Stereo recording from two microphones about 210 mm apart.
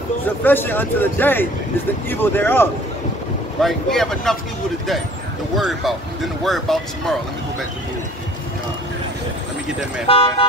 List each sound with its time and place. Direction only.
0.4 s speech: 10° left (ahead or behind)
5.6 s speech: centre (ahead or behind)
10.0 s speech: 25° left (ahead or behind)